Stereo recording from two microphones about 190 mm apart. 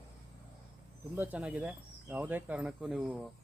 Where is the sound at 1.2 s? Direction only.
10° right (ahead or behind).